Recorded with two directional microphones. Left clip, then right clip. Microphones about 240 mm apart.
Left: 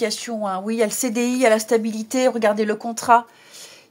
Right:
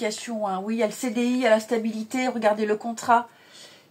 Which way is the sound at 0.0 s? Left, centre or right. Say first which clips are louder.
Left 4 dB; left.